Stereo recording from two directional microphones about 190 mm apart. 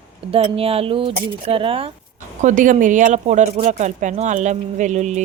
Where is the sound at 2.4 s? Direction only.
45° right (ahead or behind).